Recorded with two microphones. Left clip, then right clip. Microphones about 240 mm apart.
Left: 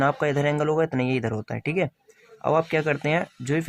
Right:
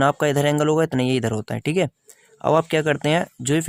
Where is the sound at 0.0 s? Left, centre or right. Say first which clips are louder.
Right 4 dB; right.